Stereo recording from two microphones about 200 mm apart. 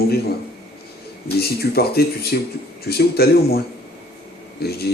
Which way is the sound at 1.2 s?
50° left (ahead or behind).